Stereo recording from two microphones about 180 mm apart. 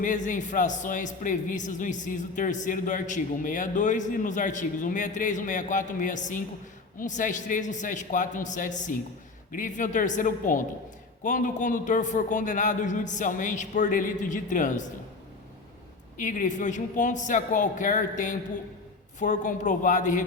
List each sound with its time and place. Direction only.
0.0 s a man's voice: 45° left (ahead or behind)
16.1 s a man's voice: 45° left (ahead or behind)